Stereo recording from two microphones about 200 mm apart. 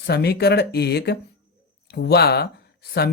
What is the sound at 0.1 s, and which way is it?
Speech, 55° left (ahead or behind).